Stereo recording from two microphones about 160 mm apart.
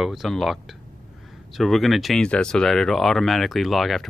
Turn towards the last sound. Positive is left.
turn(degrees=0)  # may be behind; listen again after turning